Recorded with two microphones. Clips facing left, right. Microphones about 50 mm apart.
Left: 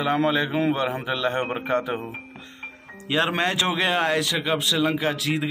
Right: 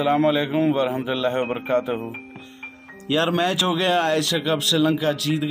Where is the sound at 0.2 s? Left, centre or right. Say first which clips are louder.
Right 3 dB; left.